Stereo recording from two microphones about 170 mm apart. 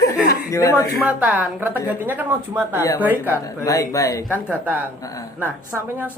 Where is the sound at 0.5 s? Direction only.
15° left (ahead or behind).